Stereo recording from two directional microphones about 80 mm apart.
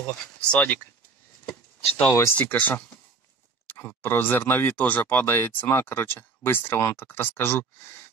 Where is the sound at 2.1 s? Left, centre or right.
Left.